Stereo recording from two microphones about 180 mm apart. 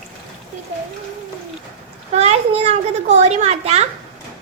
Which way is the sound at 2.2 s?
35° right (ahead or behind).